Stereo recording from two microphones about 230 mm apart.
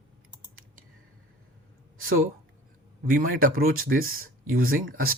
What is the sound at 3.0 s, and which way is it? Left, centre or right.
Speech, right.